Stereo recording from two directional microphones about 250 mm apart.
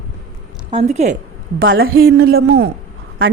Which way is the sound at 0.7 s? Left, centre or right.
Right.